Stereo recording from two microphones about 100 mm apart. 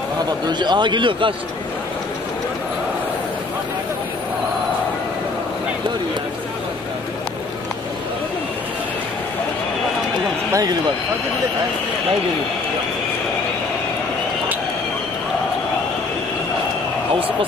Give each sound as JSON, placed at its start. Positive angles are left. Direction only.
{"t": 0.5, "sound": "a man's voice", "side_deg": -50}
{"t": 10.5, "sound": "speech", "side_deg": -40}